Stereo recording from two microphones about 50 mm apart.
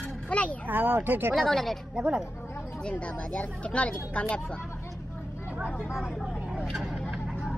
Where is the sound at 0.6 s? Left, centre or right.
Right.